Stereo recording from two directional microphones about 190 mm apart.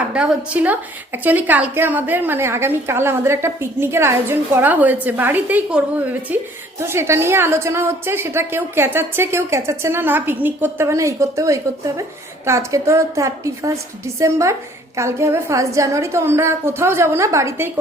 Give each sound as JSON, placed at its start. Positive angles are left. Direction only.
{"t": 0.1, "sound": "a woman's voice", "side_deg": -5}